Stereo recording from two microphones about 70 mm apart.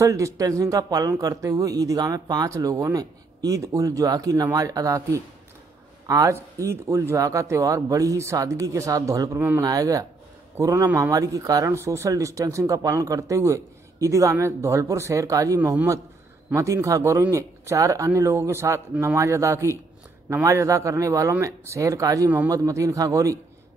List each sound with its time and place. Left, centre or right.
0.0 s speech: right
1.2 s speech: right
11.7 s speech: right
12.1 s speech: right